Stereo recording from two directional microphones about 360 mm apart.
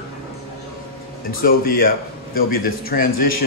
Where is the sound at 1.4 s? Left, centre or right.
Left.